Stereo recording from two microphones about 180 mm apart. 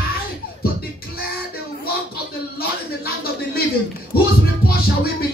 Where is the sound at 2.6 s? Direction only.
60° left (ahead or behind).